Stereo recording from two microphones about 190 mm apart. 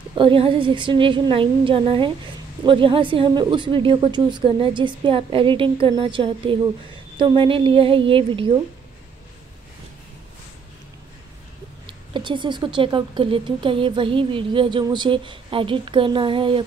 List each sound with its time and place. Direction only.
0.1 s speech: 25° right (ahead or behind)
11.8 s speech: 25° right (ahead or behind)